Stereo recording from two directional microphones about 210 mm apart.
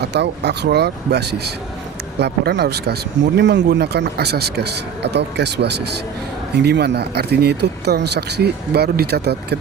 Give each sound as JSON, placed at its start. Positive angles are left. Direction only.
{"t": 0.0, "sound": "speech", "side_deg": -55}